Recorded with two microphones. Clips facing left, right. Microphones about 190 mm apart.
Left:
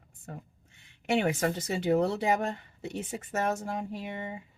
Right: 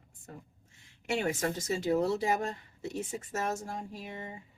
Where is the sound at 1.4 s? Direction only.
60° left (ahead or behind).